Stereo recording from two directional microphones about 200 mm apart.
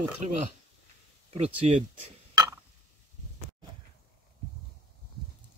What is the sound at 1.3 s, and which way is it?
Speech, 30° right (ahead or behind).